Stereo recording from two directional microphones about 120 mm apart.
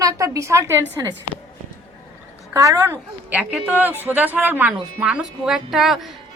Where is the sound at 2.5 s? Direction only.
25° right (ahead or behind).